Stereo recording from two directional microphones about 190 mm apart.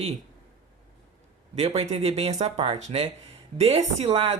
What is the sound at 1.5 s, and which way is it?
Speech, 35° right (ahead or behind).